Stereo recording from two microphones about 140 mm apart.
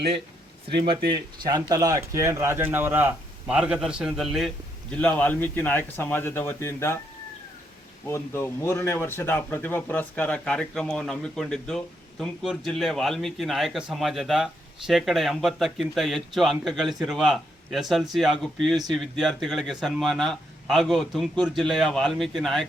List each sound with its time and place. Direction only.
0.7 s a man's voice: 35° right (ahead or behind); by 7.0 s 20° left (ahead or behind)
8.0 s a man's voice: 20° left (ahead or behind); by 22.6 s centre (ahead or behind)